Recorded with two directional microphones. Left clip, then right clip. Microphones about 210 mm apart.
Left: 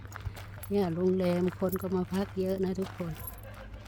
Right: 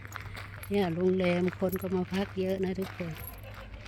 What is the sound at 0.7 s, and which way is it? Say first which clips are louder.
Speech: even; 5° left (ahead or behind).